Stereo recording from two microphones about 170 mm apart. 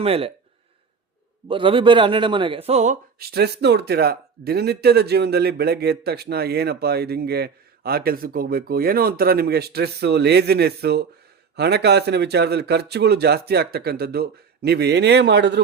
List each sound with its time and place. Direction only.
0.0 s speech: 35° right (ahead or behind)
1.5 s a man's voice: 30° right (ahead or behind)
3.2 s speech: 70° right (ahead or behind); by 15.6 s 90° right